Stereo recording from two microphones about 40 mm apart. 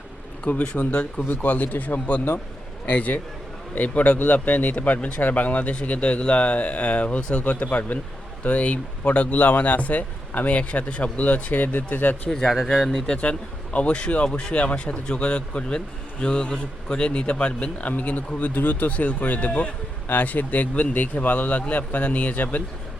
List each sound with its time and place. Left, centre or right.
0.4 s speech: left
0.9 s speech: left
1.5 s speech: left
4.9 s speech: left
5.2 s speech: left
7.4 s speech: left
12.5 s speech: centre
13.7 s speech: left
20.1 s speech: left